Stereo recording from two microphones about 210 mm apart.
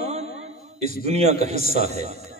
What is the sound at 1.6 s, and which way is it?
Speech, 45° left (ahead or behind).